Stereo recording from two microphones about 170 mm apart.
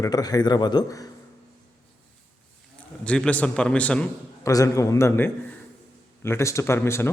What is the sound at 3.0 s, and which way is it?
Speech, 5° left (ahead or behind).